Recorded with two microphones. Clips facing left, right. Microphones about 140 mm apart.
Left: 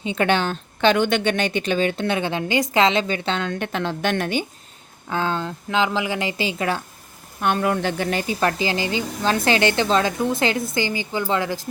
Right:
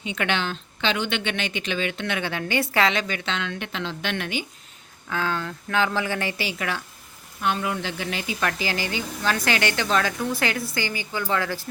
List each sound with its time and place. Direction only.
0.0 s a woman's voice: 35° left (ahead or behind)
5.0 s a woman's voice: 25° left (ahead or behind)
7.4 s a woman's voice: 55° left (ahead or behind); by 11.7 s 15° left (ahead or behind)